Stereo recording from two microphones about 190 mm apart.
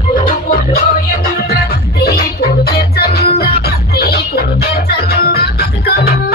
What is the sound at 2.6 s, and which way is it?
Music, 55° left (ahead or behind).